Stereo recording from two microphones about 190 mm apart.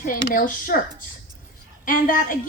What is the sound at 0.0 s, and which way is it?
Speech, 45° left (ahead or behind).